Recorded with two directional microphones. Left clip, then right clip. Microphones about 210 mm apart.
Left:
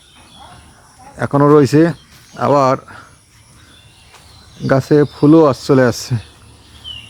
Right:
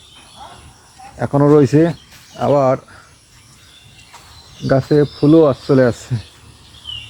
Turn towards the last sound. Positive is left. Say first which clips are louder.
# left 1 dB
turn(degrees=20)  # may be behind; listen again after turning